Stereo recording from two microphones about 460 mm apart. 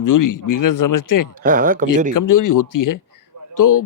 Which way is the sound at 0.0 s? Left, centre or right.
Left.